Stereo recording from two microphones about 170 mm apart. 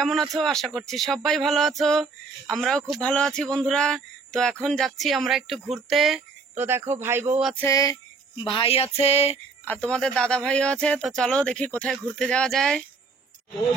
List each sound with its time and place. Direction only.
0.0 s speech: centre (ahead or behind)
6.6 s speech: 15° right (ahead or behind)
7.6 s a sound: 20° left (ahead or behind); by 9.3 s 40° left (ahead or behind)
9.7 s speech: 10° left (ahead or behind)